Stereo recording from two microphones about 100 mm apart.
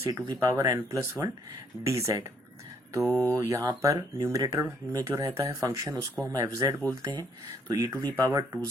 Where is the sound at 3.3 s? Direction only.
30° right (ahead or behind).